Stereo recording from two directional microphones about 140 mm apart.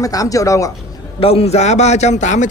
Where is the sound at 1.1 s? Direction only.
45° left (ahead or behind); by 2.4 s 60° left (ahead or behind).